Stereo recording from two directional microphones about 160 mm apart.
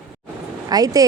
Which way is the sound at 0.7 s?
25° right (ahead or behind).